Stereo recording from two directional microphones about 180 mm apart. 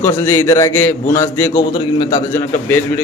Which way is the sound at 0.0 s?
15° left (ahead or behind).